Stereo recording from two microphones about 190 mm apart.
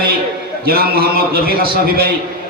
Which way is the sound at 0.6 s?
55° right (ahead or behind).